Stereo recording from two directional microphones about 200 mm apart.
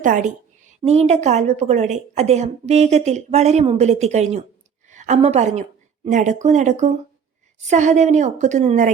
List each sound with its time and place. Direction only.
0.0 s a woman's voice: 40° right (ahead or behind)